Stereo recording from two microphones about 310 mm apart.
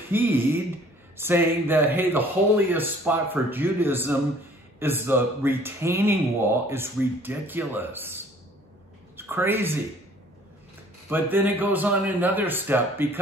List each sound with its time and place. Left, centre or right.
0.1 s a woman's voice: centre
11.1 s a man's voice: centre